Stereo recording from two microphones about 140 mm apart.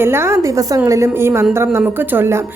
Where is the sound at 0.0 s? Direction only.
15° right (ahead or behind).